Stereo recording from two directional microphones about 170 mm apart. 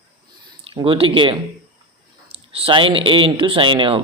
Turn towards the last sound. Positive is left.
turn(degrees=-30)  # may be behind; listen again after turning